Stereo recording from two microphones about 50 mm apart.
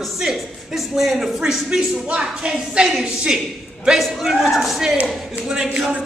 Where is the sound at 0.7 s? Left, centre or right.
Centre.